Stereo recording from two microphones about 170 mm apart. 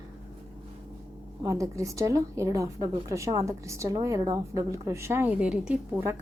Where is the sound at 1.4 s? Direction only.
20° right (ahead or behind).